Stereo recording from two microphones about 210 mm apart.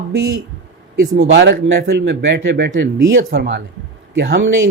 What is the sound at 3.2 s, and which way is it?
Speech, 45° right (ahead or behind).